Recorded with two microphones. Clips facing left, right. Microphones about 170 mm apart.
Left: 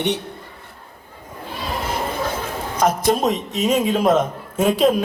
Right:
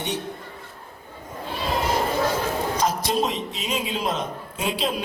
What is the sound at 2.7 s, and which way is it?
A woman's voice, 50° left (ahead or behind).